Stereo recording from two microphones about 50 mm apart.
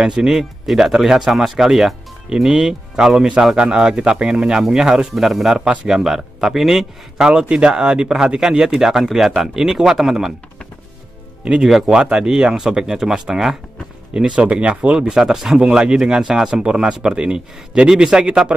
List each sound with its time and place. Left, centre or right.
0.0 s speech: centre
5.1 s speech: centre
7.2 s speech: centre
11.4 s speech: centre